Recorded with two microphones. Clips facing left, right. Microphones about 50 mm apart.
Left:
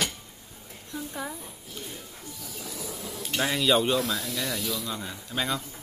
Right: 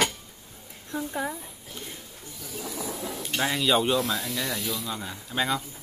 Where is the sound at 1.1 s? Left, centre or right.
Centre.